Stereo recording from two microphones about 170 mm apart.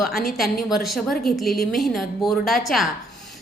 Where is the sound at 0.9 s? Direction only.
Centre (ahead or behind).